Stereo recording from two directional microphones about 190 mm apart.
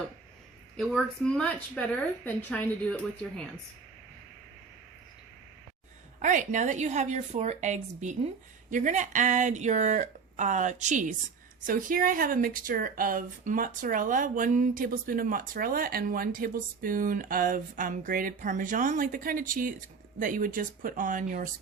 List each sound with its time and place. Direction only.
0.8 s a woman's voice: centre (ahead or behind)
6.2 s speech: 40° right (ahead or behind)